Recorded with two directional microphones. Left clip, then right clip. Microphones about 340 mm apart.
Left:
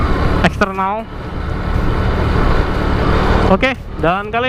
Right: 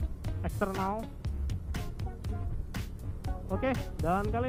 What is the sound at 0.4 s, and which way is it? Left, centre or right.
Speech, centre.